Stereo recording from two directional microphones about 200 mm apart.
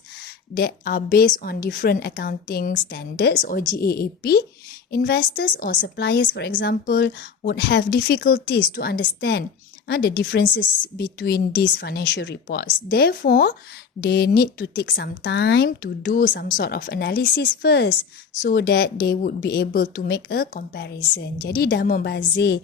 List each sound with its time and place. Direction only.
0.5 s speech: 45° left (ahead or behind)